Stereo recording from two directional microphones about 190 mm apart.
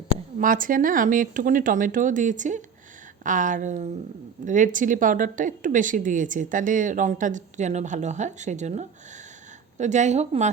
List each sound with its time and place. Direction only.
0.3 s a woman's voice: 45° right (ahead or behind)